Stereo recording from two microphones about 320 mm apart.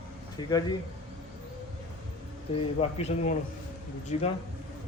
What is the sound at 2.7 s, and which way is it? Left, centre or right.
Speech, left.